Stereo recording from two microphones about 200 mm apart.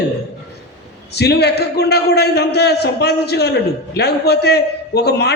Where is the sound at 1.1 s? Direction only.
55° left (ahead or behind).